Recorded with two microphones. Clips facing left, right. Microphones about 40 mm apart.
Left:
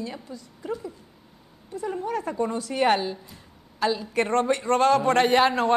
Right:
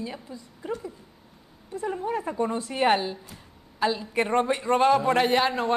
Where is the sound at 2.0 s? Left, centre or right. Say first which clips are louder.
Left 1 dB; centre.